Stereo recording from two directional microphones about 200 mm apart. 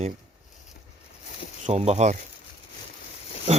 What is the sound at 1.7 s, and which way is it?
Speech, 35° right (ahead or behind).